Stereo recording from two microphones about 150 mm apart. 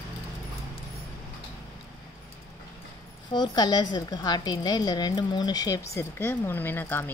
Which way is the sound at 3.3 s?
30° left (ahead or behind).